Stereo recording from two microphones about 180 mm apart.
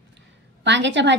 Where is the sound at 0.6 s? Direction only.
80° right.